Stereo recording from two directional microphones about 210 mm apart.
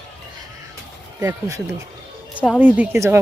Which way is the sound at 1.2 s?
15° right (ahead or behind).